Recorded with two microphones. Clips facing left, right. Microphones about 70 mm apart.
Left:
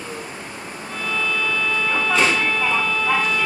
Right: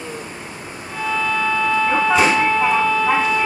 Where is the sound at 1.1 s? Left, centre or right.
Centre.